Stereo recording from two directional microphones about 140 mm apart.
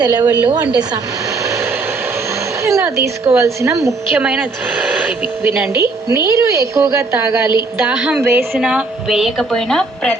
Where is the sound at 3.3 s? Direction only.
20° right (ahead or behind).